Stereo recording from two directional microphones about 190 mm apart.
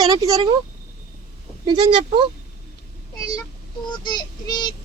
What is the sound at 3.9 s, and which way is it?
Speech, 25° left (ahead or behind).